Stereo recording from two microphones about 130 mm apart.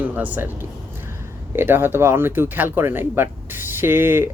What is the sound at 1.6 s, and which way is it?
Speech, 15° right (ahead or behind).